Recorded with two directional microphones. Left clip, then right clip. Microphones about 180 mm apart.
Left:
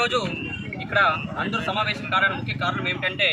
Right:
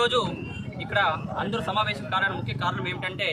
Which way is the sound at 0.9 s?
20° right (ahead or behind).